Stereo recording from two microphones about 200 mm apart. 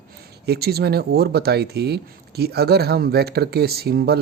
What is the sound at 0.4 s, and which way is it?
Speech, 50° right (ahead or behind).